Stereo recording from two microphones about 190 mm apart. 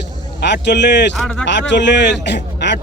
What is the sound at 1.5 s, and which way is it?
A man's voice, 70° left (ahead or behind).